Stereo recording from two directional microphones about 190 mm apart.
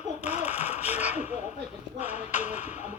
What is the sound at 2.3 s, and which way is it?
Speech, 35° left (ahead or behind).